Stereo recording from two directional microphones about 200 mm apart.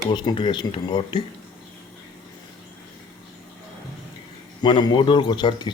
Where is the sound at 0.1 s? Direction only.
20° left (ahead or behind).